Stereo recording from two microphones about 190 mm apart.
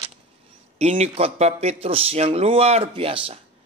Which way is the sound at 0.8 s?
35° right (ahead or behind).